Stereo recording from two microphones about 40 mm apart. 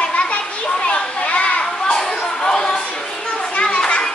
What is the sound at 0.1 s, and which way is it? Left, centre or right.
Children playing, left.